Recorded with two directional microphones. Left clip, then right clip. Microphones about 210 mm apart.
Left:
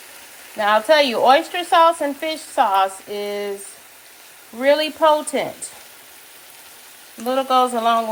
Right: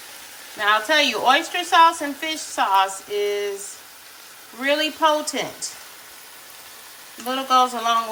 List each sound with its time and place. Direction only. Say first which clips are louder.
0.6 s a woman's voice: left 3 dB; 25° left (ahead or behind)
4.6 s a woman's voice: left 4 dB; 30° left (ahead or behind)
7.3 s speech: left 1 dB; 30° left (ahead or behind)